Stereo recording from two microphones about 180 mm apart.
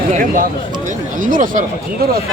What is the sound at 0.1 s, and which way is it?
Speech, 50° right (ahead or behind).